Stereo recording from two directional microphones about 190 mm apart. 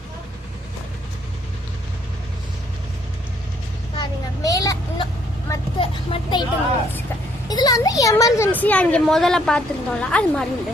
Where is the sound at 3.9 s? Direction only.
20° left (ahead or behind).